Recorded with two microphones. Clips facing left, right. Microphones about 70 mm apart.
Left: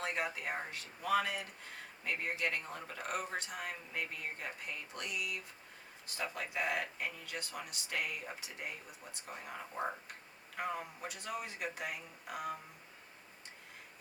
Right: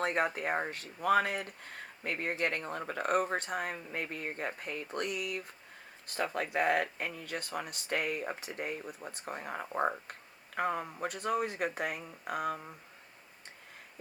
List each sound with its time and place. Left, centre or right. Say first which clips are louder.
0.0 s speech: right 7 dB; right